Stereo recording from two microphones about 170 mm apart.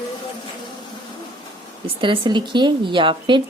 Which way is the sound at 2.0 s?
30° right (ahead or behind).